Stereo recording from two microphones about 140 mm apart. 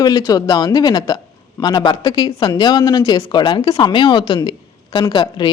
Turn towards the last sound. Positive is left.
turn(degrees=30)  # may be behind; listen again after turning